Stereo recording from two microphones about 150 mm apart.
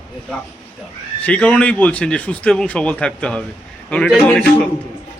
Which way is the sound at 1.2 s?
10° left (ahead or behind).